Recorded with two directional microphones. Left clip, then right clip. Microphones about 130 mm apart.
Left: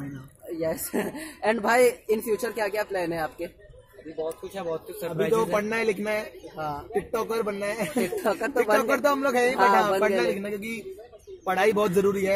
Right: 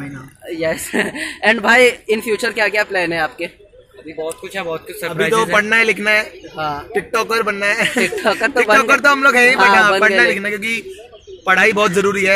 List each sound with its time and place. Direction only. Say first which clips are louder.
0.6 s speech: right 10 dB; 10° right (ahead or behind)
4.6 s speech: right 10 dB; 5° left (ahead or behind)
5.1 s speech: right 9 dB; 5° right (ahead or behind)
5.6 s a man's voice: right 13 dB; 20° left (ahead or behind)
8.2 s speech: right 9 dB; 10° right (ahead or behind)
9.0 s a man's voice: right 12 dB; 25° left (ahead or behind)